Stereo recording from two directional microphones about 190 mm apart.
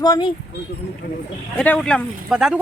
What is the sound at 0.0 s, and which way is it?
Speech, 20° left (ahead or behind).